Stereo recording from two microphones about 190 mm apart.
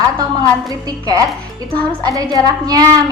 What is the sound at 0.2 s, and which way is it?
A woman's voice, 20° right (ahead or behind).